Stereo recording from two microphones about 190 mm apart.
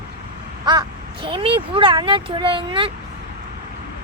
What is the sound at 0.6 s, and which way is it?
Speech, 25° right (ahead or behind).